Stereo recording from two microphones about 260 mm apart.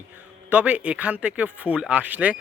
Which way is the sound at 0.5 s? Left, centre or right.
Centre.